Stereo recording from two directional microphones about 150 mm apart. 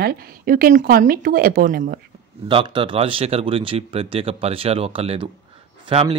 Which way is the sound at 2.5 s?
35° right (ahead or behind).